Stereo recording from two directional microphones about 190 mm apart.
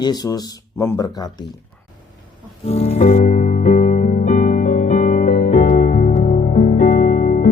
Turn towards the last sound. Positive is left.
turn(degrees=40)  # may be behind; listen again after turning